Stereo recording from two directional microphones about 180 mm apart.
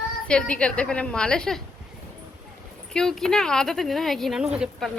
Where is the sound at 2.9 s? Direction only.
5° left (ahead or behind).